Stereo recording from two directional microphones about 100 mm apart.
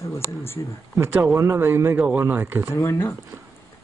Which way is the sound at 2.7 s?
25° left (ahead or behind).